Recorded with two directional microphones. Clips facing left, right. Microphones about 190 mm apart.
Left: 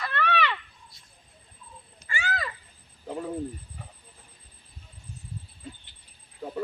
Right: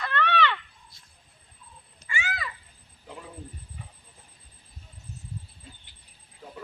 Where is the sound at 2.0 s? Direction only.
40° left (ahead or behind).